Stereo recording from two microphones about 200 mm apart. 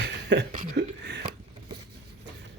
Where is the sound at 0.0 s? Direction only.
60° right (ahead or behind).